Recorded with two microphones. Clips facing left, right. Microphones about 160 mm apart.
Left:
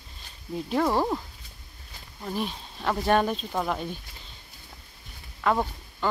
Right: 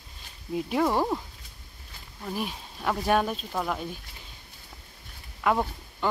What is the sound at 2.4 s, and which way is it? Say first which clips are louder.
Speech: left 2 dB; 5° right (ahead or behind).